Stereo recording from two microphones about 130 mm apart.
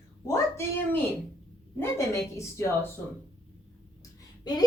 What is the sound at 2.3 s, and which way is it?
Speech, 20° left (ahead or behind).